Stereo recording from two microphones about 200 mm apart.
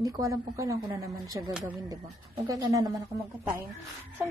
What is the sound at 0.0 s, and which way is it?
Speech, 15° right (ahead or behind).